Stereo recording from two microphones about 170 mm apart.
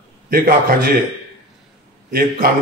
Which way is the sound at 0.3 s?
60° right (ahead or behind).